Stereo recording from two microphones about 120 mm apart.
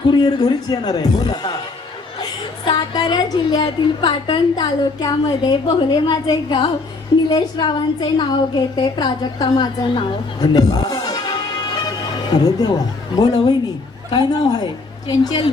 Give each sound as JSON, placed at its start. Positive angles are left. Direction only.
{"t": 0.1, "sound": "a woman's voice", "side_deg": 35}